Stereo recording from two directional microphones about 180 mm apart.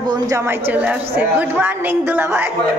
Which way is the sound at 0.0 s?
20° right (ahead or behind).